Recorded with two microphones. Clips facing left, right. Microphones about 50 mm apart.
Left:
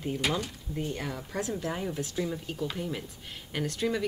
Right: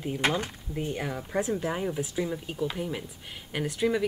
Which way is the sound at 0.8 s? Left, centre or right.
Centre.